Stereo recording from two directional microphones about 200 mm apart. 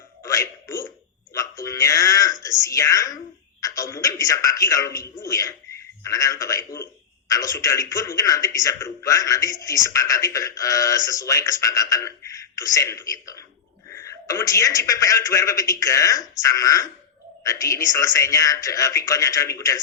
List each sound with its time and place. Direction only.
0.2 s music: 15° left (ahead or behind)
1.3 s a sound: 15° left (ahead or behind)
2.4 s whispering: 15° left (ahead or behind)
3.6 s a man's voice: 15° left (ahead or behind)